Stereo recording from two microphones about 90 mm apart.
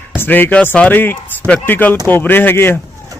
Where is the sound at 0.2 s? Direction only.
20° left (ahead or behind).